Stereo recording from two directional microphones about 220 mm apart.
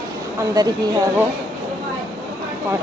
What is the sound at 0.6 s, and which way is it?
Speech, 15° right (ahead or behind).